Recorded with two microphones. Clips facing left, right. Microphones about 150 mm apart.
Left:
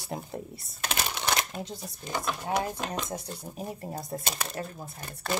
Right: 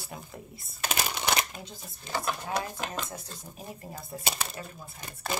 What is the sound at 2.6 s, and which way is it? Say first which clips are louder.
Speech: left 3 dB; 25° left (ahead or behind).